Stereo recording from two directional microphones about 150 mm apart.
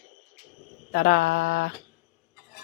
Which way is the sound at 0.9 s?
65° left (ahead or behind).